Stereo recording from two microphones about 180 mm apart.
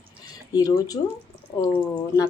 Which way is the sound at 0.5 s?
20° left (ahead or behind).